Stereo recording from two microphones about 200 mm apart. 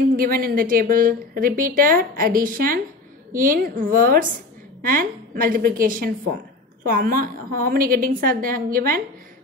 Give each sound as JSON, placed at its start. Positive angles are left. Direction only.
{"t": 0.1, "sound": "a woman's voice", "side_deg": -45}